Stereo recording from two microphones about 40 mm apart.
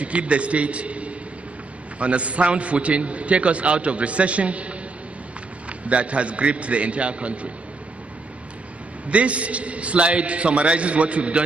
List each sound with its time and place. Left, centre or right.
0.0 s a man's voice: right
5.9 s a man's voice: right
9.1 s a man's voice: right